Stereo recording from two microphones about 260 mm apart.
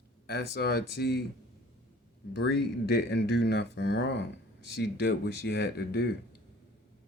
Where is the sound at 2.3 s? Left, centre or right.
Left.